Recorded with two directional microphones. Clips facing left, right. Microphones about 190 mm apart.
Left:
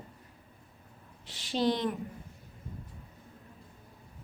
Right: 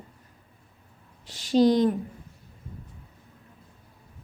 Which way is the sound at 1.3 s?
40° right (ahead or behind).